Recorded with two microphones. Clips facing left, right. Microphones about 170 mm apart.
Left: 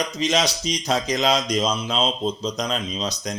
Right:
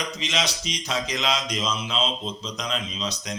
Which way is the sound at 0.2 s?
40° left (ahead or behind).